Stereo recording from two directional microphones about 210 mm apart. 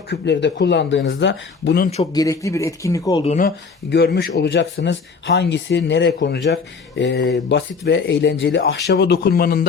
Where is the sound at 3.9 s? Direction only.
50° left (ahead or behind).